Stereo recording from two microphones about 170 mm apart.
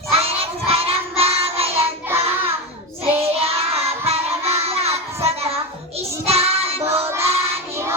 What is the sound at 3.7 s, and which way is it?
Music, 35° right (ahead or behind).